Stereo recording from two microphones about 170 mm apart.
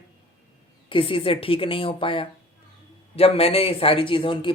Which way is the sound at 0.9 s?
30° left (ahead or behind).